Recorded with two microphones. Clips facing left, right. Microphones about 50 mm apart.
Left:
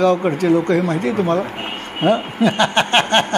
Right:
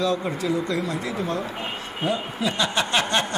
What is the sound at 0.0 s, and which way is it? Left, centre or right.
Speech, left.